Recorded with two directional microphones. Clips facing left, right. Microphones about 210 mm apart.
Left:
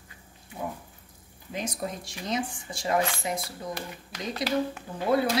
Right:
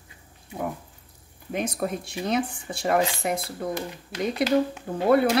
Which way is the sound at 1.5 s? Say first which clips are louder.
Right 5 dB; 60° right (ahead or behind).